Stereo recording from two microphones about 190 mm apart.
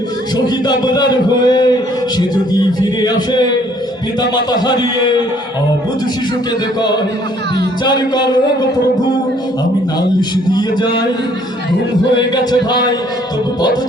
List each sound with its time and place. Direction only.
0.3 s a man's voice: 20° left (ahead or behind)
7.9 s a man's voice: 20° left (ahead or behind)
10.0 s a man's voice: 20° left (ahead or behind)
12.5 s a man's voice: 20° left (ahead or behind)